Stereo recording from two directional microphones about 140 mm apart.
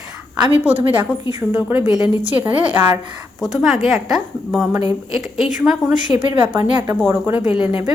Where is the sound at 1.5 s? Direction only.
5° right (ahead or behind).